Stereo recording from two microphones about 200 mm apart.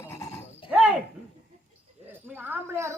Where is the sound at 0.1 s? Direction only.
15° left (ahead or behind).